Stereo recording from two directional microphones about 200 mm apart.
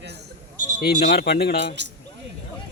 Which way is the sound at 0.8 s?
55° left (ahead or behind).